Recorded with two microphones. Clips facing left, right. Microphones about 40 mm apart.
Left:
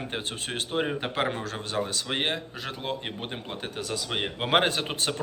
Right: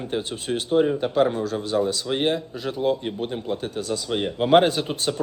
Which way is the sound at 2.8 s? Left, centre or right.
Left.